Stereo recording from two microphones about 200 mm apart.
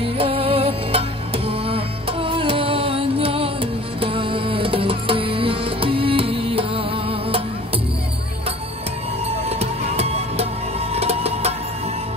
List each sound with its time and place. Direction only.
0.0 s music: 25° right (ahead or behind)
9.5 s music: 30° right (ahead or behind)